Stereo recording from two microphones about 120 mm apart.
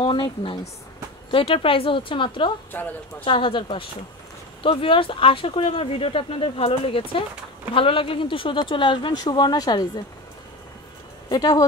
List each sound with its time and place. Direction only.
0.0 s speech: 45° left (ahead or behind)
2.7 s speech: 15° left (ahead or behind)
3.3 s speech: 45° left (ahead or behind)
11.2 s speech: 30° left (ahead or behind)